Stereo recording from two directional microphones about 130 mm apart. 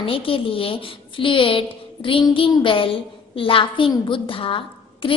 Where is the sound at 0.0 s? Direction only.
45° left (ahead or behind).